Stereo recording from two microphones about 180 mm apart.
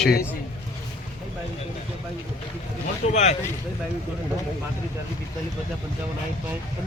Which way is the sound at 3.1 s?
40° left (ahead or behind).